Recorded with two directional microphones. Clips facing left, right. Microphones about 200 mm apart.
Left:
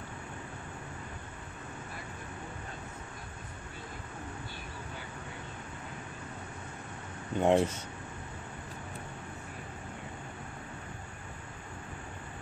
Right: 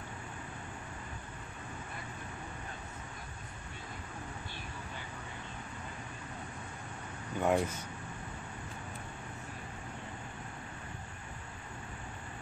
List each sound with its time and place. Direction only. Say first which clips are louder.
7.3 s speech: left 4 dB; 25° left (ahead or behind)